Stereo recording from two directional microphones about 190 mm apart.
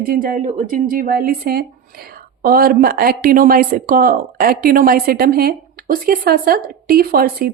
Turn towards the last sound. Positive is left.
turn(degrees=-55)  # may be behind; listen again after turning